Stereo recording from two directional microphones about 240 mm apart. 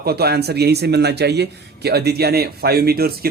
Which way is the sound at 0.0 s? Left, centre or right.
Right.